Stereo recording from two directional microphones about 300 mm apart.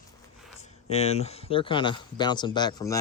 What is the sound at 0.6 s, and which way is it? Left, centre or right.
Speech, left.